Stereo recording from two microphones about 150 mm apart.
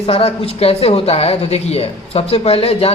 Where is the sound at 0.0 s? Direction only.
40° left (ahead or behind).